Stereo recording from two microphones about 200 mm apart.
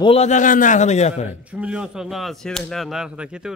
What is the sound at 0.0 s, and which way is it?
A man's voice, 30° left (ahead or behind).